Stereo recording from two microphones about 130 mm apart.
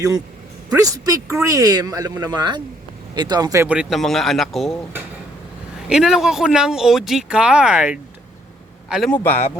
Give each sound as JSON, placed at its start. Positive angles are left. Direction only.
{"t": 0.7, "sound": "speech", "side_deg": -25}
{"t": 3.6, "sound": "speech", "side_deg": -10}
{"t": 5.9, "sound": "speech", "side_deg": -5}
{"t": 9.0, "sound": "a man's voice", "side_deg": 15}